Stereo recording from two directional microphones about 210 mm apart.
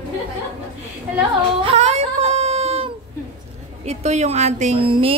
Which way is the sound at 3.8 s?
30° right (ahead or behind).